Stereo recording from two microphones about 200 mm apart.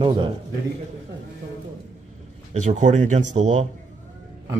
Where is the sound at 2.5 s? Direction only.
35° right (ahead or behind).